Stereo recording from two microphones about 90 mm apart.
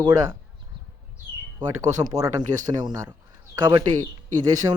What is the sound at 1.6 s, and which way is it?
Speech, 45° right (ahead or behind).